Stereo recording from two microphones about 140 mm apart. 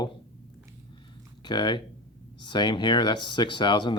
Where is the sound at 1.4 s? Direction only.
35° left (ahead or behind).